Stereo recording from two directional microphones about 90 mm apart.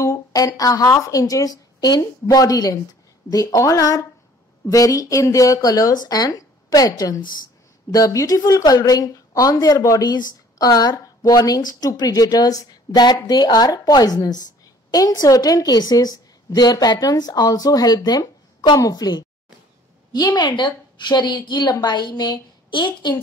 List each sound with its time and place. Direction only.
0.0 s a woman's voice: 40° left (ahead or behind)
10.0 s a woman's voice: 50° left (ahead or behind)